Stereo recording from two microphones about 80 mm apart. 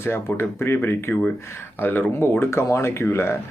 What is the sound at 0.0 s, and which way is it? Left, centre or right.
Speech, left.